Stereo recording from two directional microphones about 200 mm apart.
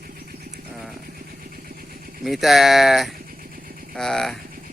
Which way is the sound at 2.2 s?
Centre (ahead or behind).